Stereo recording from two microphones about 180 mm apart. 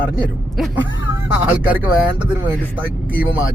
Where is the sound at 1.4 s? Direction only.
10° right (ahead or behind).